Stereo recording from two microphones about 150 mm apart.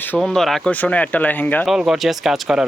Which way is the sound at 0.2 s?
Centre (ahead or behind).